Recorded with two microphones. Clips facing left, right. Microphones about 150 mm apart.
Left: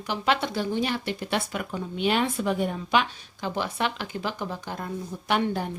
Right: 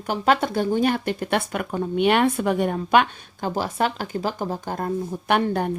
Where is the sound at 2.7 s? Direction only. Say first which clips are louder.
Right 6 dB; 55° right (ahead or behind).